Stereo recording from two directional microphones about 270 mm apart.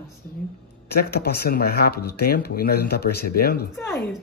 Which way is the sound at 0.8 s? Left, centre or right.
Left.